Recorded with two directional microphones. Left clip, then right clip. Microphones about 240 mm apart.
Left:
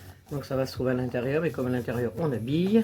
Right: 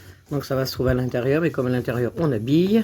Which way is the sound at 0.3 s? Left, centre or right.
Right.